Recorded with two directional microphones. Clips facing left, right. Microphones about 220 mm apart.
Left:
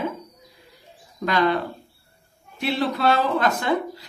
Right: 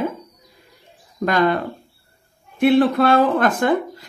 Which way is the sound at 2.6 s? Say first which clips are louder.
Right 9 dB; 50° right (ahead or behind).